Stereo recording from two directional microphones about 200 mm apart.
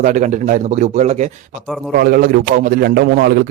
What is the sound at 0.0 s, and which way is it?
A man's voice, 35° right (ahead or behind).